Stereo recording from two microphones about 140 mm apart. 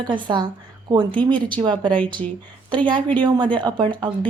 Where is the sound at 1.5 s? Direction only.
35° right (ahead or behind).